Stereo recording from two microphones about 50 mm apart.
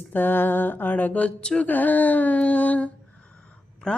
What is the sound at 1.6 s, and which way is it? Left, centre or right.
Speech, left.